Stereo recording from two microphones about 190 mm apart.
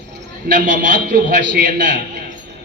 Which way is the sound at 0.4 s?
45° right (ahead or behind).